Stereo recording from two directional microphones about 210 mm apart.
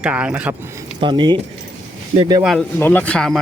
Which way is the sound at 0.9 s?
20° right (ahead or behind).